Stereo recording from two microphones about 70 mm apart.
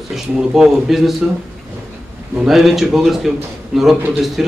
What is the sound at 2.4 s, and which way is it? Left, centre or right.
Speech, centre.